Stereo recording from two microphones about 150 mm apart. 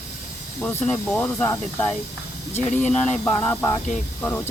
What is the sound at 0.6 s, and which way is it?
Speech, 10° left (ahead or behind).